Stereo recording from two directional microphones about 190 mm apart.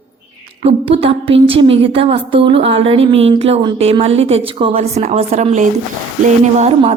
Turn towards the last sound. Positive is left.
turn(degrees=-35)  # may be behind; listen again after turning